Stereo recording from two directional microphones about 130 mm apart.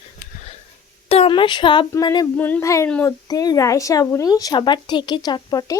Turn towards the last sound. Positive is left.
turn(degrees=30)  # may be behind; listen again after turning